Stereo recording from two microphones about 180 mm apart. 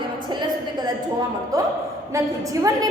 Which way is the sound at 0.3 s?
25° right (ahead or behind).